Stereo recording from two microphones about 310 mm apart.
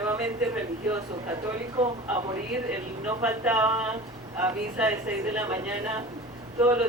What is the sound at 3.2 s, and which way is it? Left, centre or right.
A man's voice, centre.